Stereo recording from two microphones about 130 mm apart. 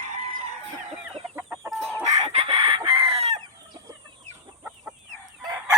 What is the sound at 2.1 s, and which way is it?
Chicken, 55° right (ahead or behind).